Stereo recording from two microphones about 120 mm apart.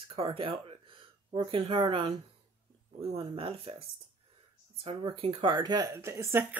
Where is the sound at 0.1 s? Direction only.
50° right (ahead or behind).